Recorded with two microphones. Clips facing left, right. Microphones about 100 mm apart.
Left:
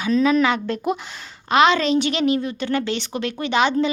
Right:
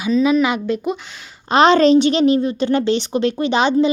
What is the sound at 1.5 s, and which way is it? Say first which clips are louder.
A woman's voice: right 5 dB; 35° right (ahead or behind).